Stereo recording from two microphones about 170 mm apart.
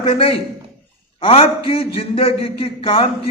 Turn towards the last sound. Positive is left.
turn(degrees=30)  # may be behind; listen again after turning